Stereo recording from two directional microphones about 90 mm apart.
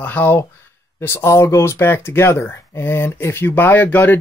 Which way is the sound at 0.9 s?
30° left (ahead or behind).